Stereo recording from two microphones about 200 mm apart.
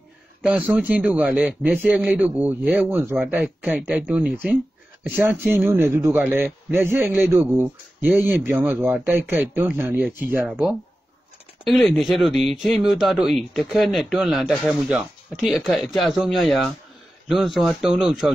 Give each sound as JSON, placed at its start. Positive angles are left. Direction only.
{"t": 0.4, "sound": "a man's voice", "side_deg": -5}